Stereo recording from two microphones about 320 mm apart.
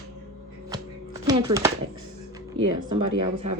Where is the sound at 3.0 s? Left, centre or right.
Right.